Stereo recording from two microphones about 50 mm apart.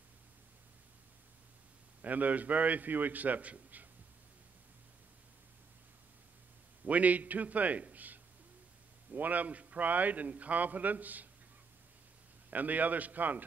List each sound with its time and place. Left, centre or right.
2.0 s a man's voice: right
6.9 s a man's voice: right
12.4 s a man's voice: right